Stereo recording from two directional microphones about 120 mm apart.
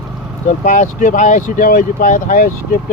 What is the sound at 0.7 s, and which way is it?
Speech, 90° left.